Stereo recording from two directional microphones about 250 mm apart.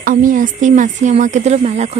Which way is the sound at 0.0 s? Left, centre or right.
Right.